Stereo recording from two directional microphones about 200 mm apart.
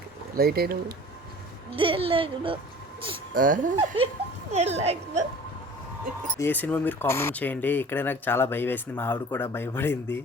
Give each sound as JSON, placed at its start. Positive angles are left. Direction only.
{"t": 0.3, "sound": "speech", "side_deg": -50}
{"t": 1.7, "sound": "speech", "side_deg": -25}
{"t": 3.3, "sound": "speech", "side_deg": -45}
{"t": 3.8, "sound": "a woman's voice", "side_deg": -25}
{"t": 6.4, "sound": "speech", "side_deg": 10}